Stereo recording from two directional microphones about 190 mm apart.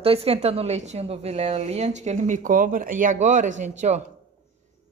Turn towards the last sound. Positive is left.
turn(degrees=-40)  # may be behind; listen again after turning